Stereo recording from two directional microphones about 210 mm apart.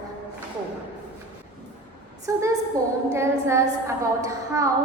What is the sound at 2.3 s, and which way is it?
A woman's voice, 15° right (ahead or behind).